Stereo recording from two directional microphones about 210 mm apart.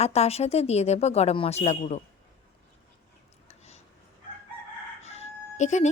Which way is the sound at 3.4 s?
30° left (ahead or behind).